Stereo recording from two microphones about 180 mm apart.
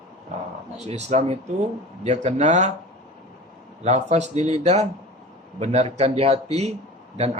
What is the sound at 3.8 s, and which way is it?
Speech, 40° right (ahead or behind).